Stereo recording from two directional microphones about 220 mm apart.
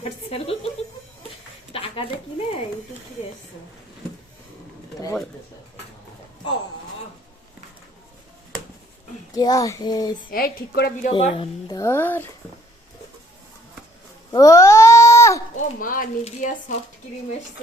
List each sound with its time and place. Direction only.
0.0 s speech: 25° left (ahead or behind)
1.7 s a sound: 25° left (ahead or behind)
9.3 s speech: 15° left (ahead or behind)
10.2 s a woman's voice: 40° left (ahead or behind)
11.0 s speech: 25° left (ahead or behind); by 12.3 s 10° left (ahead or behind)
14.3 s a sound: 15° left (ahead or behind)
15.5 s speech: 40° left (ahead or behind)